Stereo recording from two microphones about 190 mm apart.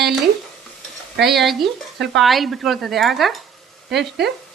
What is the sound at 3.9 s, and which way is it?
Speech, 60° right (ahead or behind).